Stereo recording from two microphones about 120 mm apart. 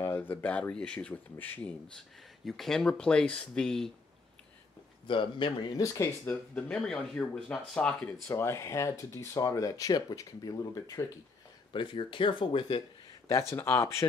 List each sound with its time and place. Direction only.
0.0 s speech: 20° left (ahead or behind)
2.0 s speech: 5° left (ahead or behind)
5.0 s speech: 45° left (ahead or behind)
5.8 s speech: 25° left (ahead or behind)
6.5 s speech: 10° left (ahead or behind); by 11.1 s 30° left (ahead or behind)
11.7 s speech: 40° left (ahead or behind)
13.3 s speech: 20° left (ahead or behind)